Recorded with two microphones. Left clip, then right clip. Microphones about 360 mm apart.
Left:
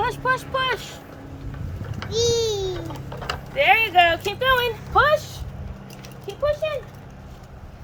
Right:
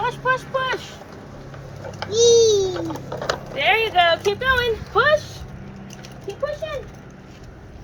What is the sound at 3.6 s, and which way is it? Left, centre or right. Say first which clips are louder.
Speech: left 2 dB; centre.